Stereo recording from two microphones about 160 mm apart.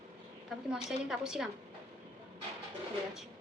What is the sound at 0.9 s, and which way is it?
Speech, 5° right (ahead or behind).